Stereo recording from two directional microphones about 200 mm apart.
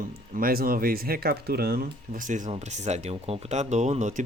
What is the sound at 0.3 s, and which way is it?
Speech, 45° right (ahead or behind).